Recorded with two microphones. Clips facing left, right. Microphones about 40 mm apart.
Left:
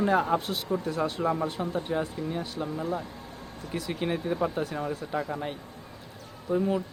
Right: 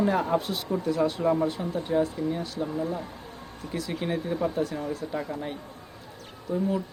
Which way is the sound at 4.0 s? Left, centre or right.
Centre.